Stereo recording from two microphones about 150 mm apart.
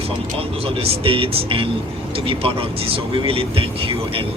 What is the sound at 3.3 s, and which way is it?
Speech, 40° right (ahead or behind).